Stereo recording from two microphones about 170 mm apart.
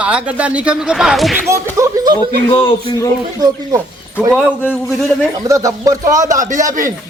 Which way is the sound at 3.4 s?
25° right (ahead or behind).